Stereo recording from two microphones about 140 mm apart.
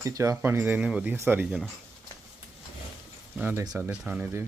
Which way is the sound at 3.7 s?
5° right (ahead or behind).